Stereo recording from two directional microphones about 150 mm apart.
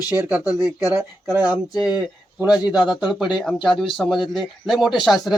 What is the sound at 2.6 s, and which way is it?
Speech, 25° left (ahead or behind).